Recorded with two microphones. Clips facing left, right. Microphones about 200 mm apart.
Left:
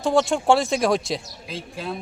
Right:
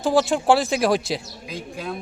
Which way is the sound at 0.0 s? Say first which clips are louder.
Right 1 dB; centre (ahead or behind).